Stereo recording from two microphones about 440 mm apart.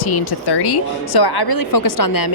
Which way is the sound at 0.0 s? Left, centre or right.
Left.